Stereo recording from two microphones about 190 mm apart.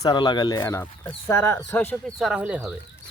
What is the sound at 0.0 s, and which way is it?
Speech, 20° left (ahead or behind).